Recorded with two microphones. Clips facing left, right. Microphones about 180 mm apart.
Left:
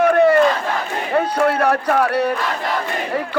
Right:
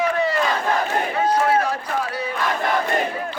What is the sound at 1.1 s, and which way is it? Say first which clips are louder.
Speech: left 3 dB; 60° left (ahead or behind).